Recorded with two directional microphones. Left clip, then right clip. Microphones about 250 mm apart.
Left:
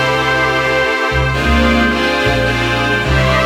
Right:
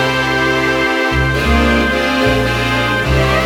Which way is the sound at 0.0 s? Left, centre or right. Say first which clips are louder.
Left 1 dB; centre.